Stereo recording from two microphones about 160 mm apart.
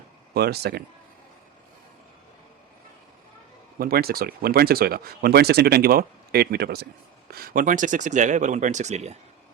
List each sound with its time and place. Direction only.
0.3 s speech: 85° right
3.8 s speech: 70° right (ahead or behind)
7.3 s speech: 70° right (ahead or behind); by 9.1 s 45° right (ahead or behind)